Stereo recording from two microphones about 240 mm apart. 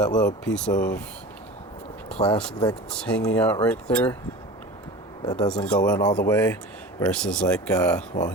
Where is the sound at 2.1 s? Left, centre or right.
Centre.